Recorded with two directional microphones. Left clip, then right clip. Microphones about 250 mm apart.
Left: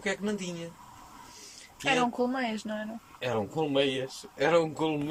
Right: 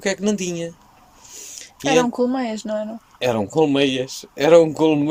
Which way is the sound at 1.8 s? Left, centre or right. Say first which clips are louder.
Right 9 dB; centre.